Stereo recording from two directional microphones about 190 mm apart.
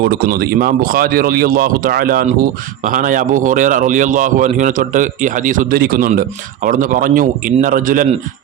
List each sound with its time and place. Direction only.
0.0 s speech: 55° right (ahead or behind)